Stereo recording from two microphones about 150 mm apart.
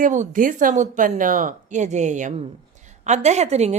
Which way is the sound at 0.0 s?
60° right (ahead or behind).